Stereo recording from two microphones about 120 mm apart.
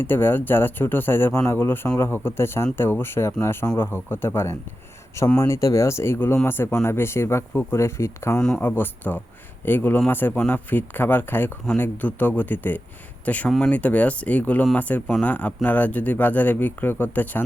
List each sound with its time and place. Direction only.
0.0 s speech: 20° left (ahead or behind)
8.4 s speech: 5° left (ahead or behind)
8.6 s speech: 15° left (ahead or behind)